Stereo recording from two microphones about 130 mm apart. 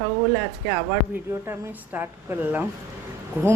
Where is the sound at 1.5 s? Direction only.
15° right (ahead or behind).